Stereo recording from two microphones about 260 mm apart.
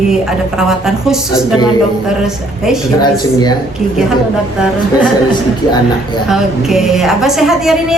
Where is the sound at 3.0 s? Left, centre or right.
Centre.